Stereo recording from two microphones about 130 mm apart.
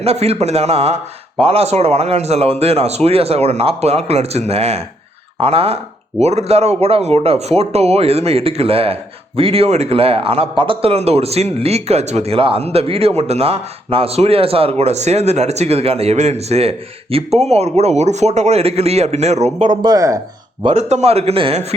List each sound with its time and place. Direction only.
0.0 s speech: 50° right (ahead or behind)
19.6 s speech: 35° right (ahead or behind)
20.7 s speech: 60° right (ahead or behind)